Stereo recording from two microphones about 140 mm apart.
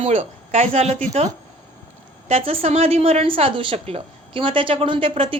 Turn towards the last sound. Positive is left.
turn(degrees=-40)  # may be behind; listen again after turning